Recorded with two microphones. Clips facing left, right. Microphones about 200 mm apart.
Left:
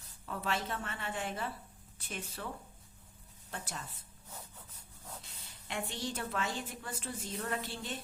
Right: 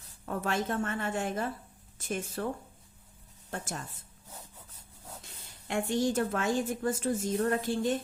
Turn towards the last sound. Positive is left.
turn(degrees=-45)  # may be behind; listen again after turning